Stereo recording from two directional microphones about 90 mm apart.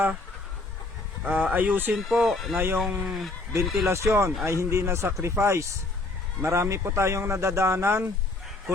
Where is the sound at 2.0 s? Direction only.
Centre (ahead or behind).